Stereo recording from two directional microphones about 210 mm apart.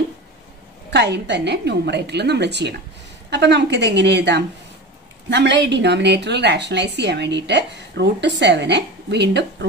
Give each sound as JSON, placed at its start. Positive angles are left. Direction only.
{"t": 0.8, "sound": "a woman's voice", "side_deg": -55}